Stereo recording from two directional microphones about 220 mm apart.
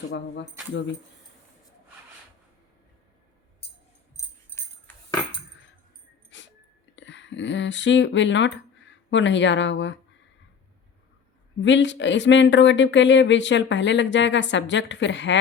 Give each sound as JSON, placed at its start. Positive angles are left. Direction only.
{"t": 6.3, "sound": "dog", "side_deg": 55}
{"t": 6.9, "sound": "speech", "side_deg": 55}
{"t": 11.6, "sound": "speech", "side_deg": 55}